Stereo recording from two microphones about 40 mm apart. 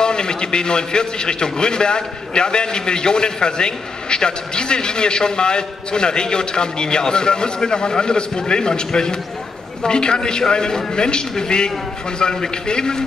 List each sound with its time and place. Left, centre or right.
0.0 s a man's voice: centre